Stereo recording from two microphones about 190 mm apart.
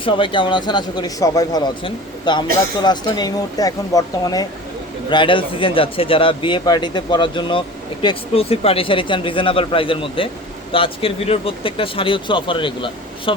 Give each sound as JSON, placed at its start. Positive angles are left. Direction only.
{"t": 0.0, "sound": "speech", "side_deg": 25}